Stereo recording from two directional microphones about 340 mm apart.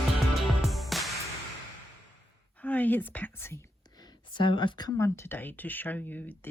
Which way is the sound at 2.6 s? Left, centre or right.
Centre.